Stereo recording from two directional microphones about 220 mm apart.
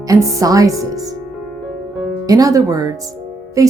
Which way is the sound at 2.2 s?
15° right (ahead or behind).